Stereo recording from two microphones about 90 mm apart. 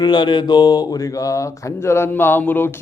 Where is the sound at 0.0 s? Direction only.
55° left (ahead or behind).